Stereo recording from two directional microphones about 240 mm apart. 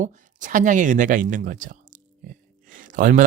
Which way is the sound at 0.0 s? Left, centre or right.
Right.